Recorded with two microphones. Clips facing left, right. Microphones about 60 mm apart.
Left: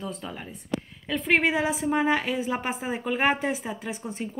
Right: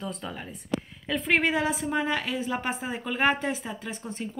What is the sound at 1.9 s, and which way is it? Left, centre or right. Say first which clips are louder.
A woman's voice: left 4 dB; left.